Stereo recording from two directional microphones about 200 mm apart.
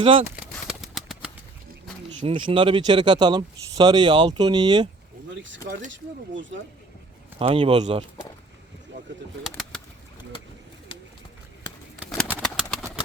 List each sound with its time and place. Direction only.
0.0 s speech: 30° right (ahead or behind)
0.5 s a sound: centre (ahead or behind)
2.2 s speech: 25° right (ahead or behind)
5.3 s speech: 65° right (ahead or behind)
7.3 s speech: 30° right (ahead or behind)
9.4 s bird: centre (ahead or behind)
12.1 s bird: 5° left (ahead or behind)